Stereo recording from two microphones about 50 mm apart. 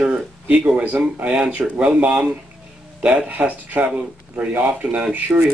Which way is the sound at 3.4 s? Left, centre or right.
Right.